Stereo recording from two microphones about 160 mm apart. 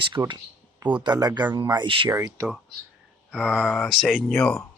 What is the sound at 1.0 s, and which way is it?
Speech, 25° right (ahead or behind).